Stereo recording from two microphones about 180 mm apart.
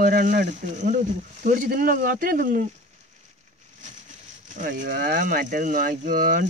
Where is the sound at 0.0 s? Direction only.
50° right (ahead or behind).